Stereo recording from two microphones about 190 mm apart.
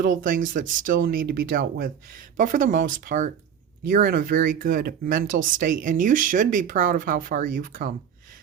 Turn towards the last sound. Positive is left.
turn(degrees=-45)  # may be behind; listen again after turning